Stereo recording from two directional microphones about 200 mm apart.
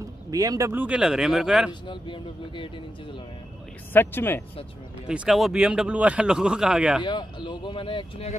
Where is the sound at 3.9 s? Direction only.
10° left (ahead or behind).